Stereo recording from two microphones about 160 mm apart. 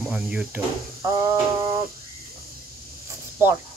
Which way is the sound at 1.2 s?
20° right (ahead or behind).